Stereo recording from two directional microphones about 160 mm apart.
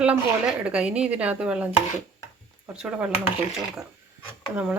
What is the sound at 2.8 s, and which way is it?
Speech, 5° right (ahead or behind).